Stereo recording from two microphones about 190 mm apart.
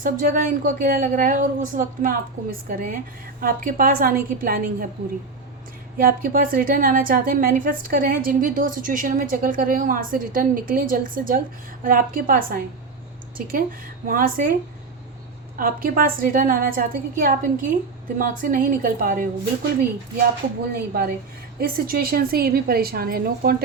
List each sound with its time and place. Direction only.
0.0 s a woman's voice: 45° right (ahead or behind)
6.0 s a woman's voice: 45° right (ahead or behind)
15.5 s a woman's voice: 50° right (ahead or behind)
20.7 s a woman's voice: 50° right (ahead or behind)